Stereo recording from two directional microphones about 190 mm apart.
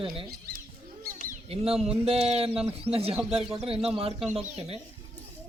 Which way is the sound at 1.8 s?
30° right (ahead or behind).